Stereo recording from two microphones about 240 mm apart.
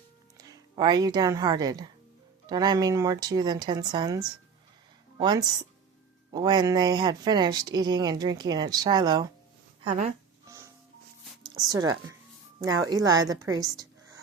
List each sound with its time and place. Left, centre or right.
0.4 s a woman's voice: centre
9.9 s speech: right
10.4 s music: centre
11.5 s a woman's voice: centre